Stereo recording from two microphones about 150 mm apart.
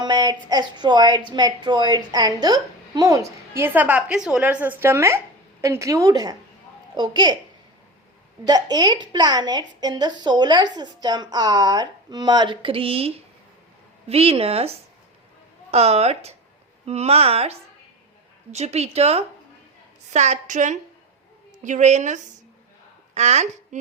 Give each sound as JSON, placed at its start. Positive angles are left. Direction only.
{"t": 0.0, "sound": "a woman's voice", "side_deg": -30}
{"t": 8.4, "sound": "a woman's voice", "side_deg": -25}